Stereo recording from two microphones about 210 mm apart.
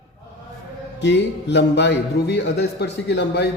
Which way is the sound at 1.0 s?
55° left (ahead or behind).